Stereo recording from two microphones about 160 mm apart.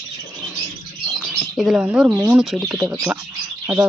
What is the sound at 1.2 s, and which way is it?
Bird, centre (ahead or behind).